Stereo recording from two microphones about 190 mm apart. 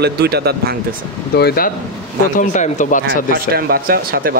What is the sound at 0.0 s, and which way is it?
Speech, 55° right (ahead or behind).